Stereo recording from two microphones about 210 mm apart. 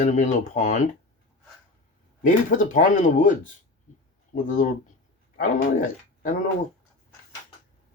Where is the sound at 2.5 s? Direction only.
40° left (ahead or behind).